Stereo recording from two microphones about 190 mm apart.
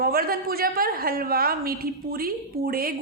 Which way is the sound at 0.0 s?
50° right (ahead or behind).